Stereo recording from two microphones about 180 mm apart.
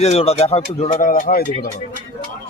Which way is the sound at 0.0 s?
35° left (ahead or behind).